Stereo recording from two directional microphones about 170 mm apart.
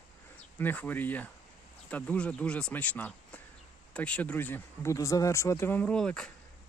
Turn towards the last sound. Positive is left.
turn(degrees=5)  # may be behind; listen again after turning